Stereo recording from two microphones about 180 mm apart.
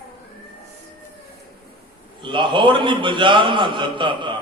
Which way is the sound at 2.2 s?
25° right (ahead or behind).